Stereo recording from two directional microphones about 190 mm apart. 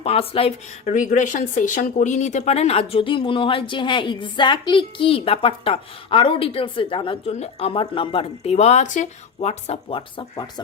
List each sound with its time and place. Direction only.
0.0 s speech: 30° left (ahead or behind)